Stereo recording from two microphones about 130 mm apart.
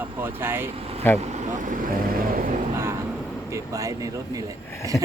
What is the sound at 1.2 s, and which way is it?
Speech, 60° right (ahead or behind).